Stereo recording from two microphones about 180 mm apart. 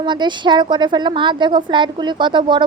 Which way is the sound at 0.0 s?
25° right (ahead or behind).